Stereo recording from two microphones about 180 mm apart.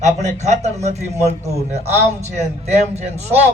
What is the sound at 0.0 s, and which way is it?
A man's voice, 40° right (ahead or behind).